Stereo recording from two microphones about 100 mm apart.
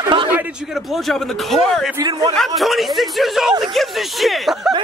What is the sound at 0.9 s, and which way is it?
A man's voice, centre (ahead or behind).